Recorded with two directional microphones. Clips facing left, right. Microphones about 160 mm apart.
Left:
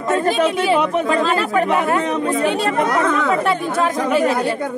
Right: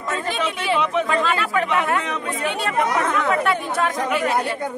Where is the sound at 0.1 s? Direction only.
45° left (ahead or behind).